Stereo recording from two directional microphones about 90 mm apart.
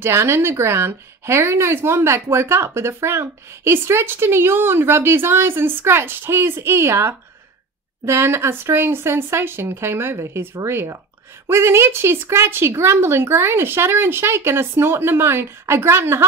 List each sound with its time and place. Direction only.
0.0 s a woman's voice: 30° right (ahead or behind)